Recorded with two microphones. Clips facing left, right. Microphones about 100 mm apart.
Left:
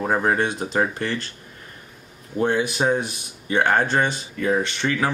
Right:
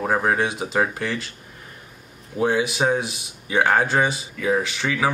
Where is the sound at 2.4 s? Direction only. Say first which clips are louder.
Even; 5° right (ahead or behind).